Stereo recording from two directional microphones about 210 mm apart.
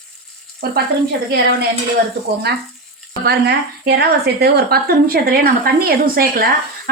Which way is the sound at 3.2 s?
50° right (ahead or behind).